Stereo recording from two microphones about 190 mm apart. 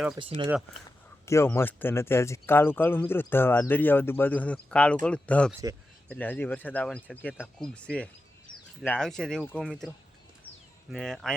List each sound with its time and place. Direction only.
0.2 s speech: 25° right (ahead or behind)
1.2 s speech: 15° left (ahead or behind)
5.5 s speech: 15° right (ahead or behind)
6.1 s speech: 10° left (ahead or behind)
10.9 s speech: centre (ahead or behind)